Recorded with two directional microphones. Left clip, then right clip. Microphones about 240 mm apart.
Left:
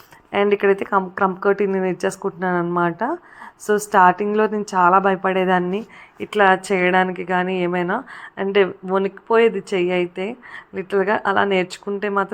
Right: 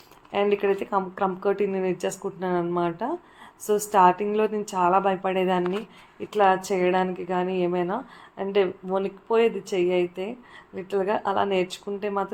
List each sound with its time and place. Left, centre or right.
0.3 s a woman's voice: centre